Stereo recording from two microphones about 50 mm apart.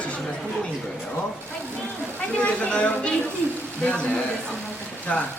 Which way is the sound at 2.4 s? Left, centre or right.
Left.